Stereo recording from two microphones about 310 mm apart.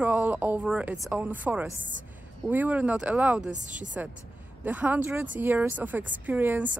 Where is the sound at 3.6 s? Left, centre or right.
Right.